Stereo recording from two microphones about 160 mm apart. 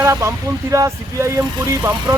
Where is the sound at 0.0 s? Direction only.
20° right (ahead or behind).